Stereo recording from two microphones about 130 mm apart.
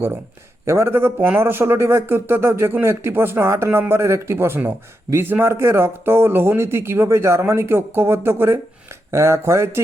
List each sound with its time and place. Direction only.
0.6 s speech: 20° right (ahead or behind)